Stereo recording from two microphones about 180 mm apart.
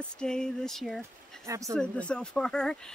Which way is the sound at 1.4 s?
15° right (ahead or behind).